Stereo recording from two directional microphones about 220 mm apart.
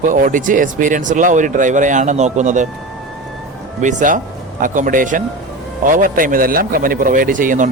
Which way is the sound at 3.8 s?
35° right (ahead or behind).